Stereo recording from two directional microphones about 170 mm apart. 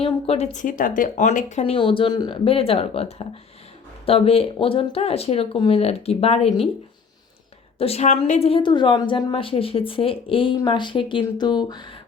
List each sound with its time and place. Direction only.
0.0 s a woman's voice: 35° left (ahead or behind)
7.8 s a woman's voice: 35° left (ahead or behind)